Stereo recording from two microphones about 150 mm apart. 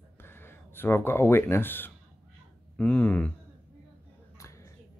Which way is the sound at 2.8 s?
5° left (ahead or behind).